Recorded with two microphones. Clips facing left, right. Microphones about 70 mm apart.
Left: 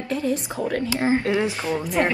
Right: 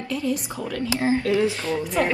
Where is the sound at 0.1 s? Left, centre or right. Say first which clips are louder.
Left 2 dB; left.